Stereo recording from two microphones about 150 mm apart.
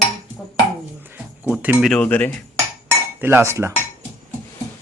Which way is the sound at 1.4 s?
10° right (ahead or behind).